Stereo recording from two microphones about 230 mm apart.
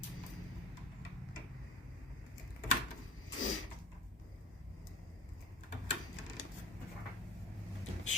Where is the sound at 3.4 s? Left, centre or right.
Left.